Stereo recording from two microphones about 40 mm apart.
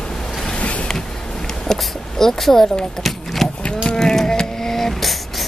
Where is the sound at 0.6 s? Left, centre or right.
Left.